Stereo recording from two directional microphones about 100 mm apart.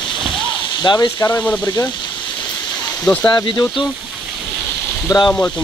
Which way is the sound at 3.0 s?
15° left (ahead or behind).